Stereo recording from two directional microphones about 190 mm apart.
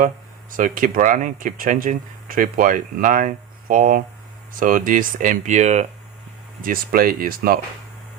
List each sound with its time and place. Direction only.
0.5 s speech: 45° right (ahead or behind)